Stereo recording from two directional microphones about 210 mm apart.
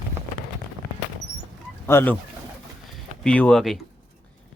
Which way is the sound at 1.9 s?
10° left (ahead or behind).